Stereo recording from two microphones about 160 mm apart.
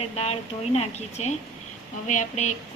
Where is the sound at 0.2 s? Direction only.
40° left (ahead or behind).